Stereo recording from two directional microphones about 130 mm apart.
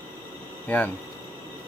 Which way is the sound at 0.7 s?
15° left (ahead or behind).